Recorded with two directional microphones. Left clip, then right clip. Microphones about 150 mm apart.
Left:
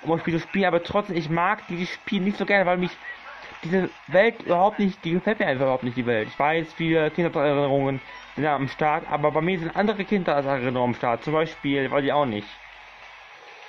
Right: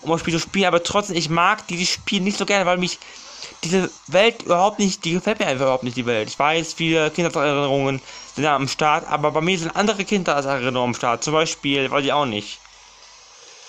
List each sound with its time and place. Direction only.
0.0 s speech: centre (ahead or behind)